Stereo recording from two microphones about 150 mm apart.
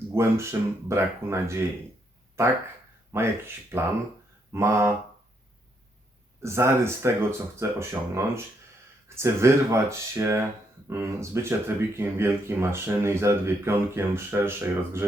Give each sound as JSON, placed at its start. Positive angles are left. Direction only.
{"t": 0.1, "sound": "speech", "side_deg": -15}
{"t": 6.4, "sound": "speech", "side_deg": -15}